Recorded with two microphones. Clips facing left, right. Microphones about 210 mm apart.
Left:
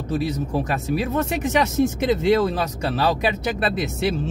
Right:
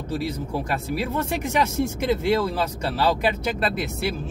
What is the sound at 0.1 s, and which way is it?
Speech, 20° left (ahead or behind).